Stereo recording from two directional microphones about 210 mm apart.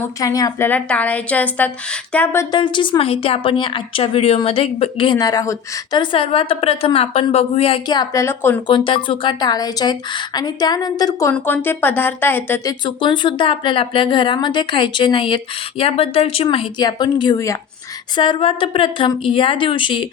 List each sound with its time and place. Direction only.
0.0 s a woman's voice: 15° left (ahead or behind)
8.6 s a woman's voice: 25° left (ahead or behind)
12.8 s a woman's voice: 20° left (ahead or behind)